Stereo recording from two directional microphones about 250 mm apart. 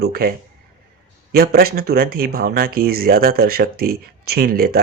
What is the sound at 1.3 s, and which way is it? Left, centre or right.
Speech, right.